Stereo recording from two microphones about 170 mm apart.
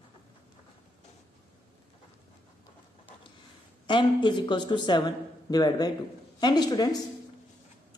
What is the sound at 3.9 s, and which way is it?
Speech, 30° left (ahead or behind).